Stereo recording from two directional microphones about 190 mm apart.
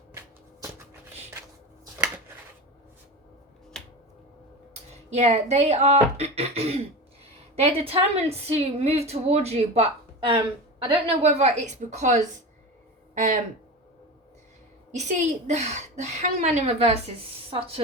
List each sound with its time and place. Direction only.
0.2 s a sound: 15° right (ahead or behind)
5.1 s a woman's voice: 35° right (ahead or behind)
14.9 s a woman's voice: 40° right (ahead or behind)